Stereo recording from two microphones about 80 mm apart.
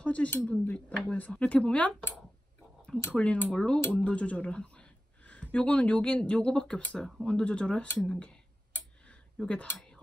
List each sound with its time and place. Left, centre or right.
0.0 s speech: centre
3.1 s speech: centre
9.0 s a sound: centre